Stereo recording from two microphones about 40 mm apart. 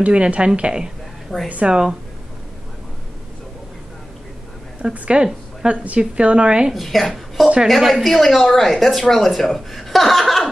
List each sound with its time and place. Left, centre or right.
0.0 s a woman's voice: right
1.3 s a woman's voice: centre
1.7 s a woman's voice: centre
4.9 s a woman's voice: right
6.7 s a woman's voice: centre